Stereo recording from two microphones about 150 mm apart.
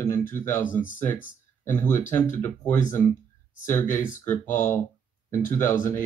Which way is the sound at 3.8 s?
60° left (ahead or behind).